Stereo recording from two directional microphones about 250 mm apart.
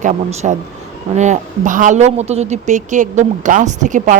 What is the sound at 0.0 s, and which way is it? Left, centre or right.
A woman's voice, right.